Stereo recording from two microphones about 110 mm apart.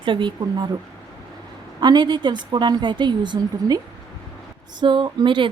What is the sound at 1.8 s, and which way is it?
A woman's voice, 40° right (ahead or behind).